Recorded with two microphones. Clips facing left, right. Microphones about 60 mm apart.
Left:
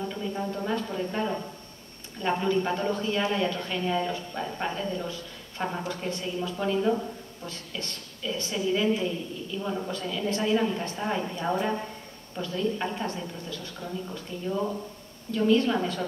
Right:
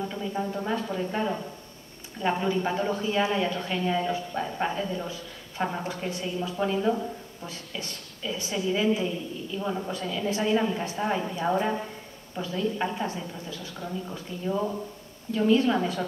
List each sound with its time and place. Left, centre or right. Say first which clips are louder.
0.1 s speech: right 1 dB; centre